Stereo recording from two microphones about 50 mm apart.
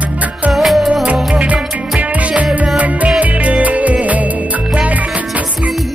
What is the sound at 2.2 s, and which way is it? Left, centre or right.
Music, right.